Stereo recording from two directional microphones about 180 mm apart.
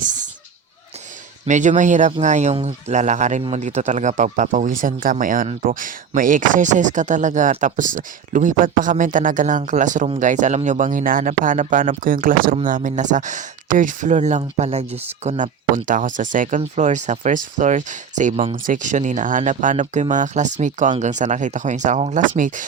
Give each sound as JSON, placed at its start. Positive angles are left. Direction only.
{"t": 1.5, "sound": "speech", "side_deg": -45}